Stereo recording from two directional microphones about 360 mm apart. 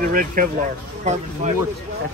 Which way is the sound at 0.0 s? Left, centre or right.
Right.